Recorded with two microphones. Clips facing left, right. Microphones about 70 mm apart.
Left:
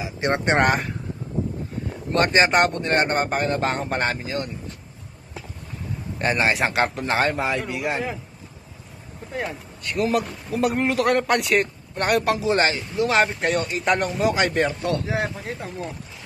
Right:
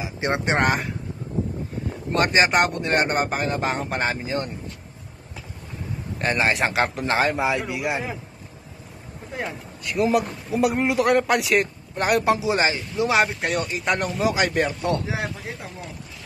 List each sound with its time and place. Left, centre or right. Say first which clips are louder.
0.3 s a man's voice: left 2 dB; centre
2.1 s a man's voice: left 1 dB; centre
6.1 s a man's voice: left 1 dB; centre
9.3 s a man's voice: left 1 dB; centre
12.3 s a man's voice: even; centre
13.1 s a man's voice: left 1 dB; centre
14.7 s a man's voice: even; right
15.0 s a man's voice: left 3 dB; centre